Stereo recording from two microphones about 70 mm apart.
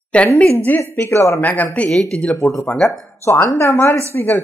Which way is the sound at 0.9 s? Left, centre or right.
Left.